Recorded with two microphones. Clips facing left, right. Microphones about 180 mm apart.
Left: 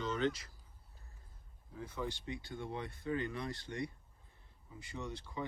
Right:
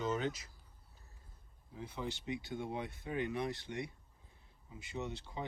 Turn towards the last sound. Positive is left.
turn(degrees=-25)  # may be behind; listen again after turning